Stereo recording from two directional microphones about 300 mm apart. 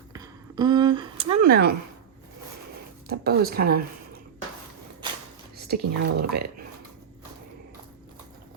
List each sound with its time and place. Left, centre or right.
0.1 s a sound: centre
1.5 s speech: right
3.1 s speech: right
5.5 s speech: right